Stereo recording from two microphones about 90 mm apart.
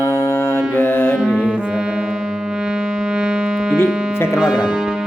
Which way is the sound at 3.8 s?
5° right (ahead or behind).